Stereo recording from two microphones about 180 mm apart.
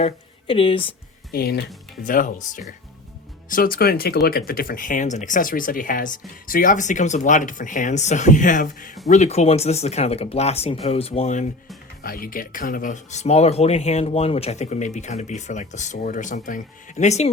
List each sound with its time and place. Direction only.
0.0 s speech: 30° left (ahead or behind)
1.3 s speech: 60° left (ahead or behind); by 11.4 s 40° left (ahead or behind)
12.0 s speech: 50° left (ahead or behind)